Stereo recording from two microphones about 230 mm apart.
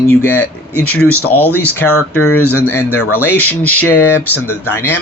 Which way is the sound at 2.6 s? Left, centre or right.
Centre.